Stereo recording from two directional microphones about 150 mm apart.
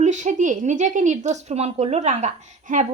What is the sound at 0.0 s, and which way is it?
A woman's voice, 55° right (ahead or behind).